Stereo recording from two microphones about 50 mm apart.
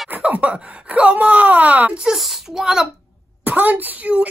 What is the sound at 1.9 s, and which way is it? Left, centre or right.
Speech, centre.